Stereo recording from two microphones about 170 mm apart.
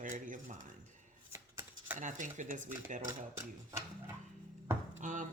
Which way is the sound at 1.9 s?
45° right (ahead or behind).